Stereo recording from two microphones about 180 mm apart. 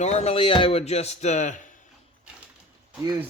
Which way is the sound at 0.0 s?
40° left (ahead or behind).